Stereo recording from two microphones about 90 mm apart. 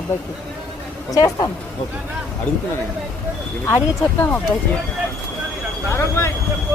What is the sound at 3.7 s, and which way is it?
Speech, 25° left (ahead or behind).